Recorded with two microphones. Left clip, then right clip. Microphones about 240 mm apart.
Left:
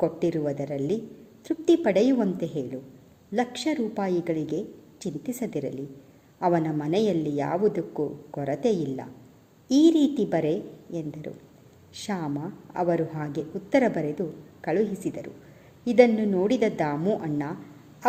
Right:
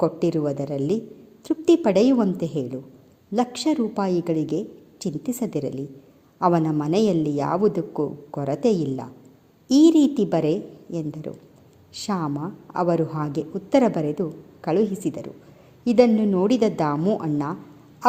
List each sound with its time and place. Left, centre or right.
0.0 s a woman's voice: right